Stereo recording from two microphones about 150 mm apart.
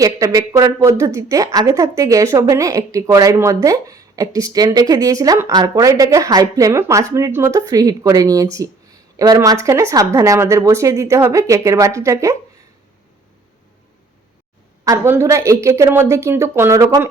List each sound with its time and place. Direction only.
0.0 s speech: 25° right (ahead or behind)
14.8 s speech: 15° right (ahead or behind)